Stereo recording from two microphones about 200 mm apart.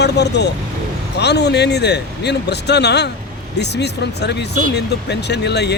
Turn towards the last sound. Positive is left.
turn(degrees=55)  # may be behind; listen again after turning